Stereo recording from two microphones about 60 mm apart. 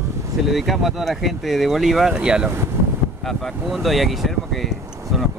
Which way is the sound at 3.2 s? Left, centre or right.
Centre.